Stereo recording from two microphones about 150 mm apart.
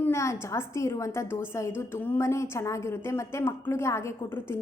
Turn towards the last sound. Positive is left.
turn(degrees=15)  # may be behind; listen again after turning